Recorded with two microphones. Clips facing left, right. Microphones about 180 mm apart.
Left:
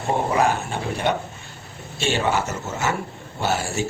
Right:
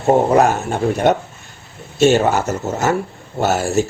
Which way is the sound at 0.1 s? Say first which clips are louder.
Right 8 dB; 45° right (ahead or behind).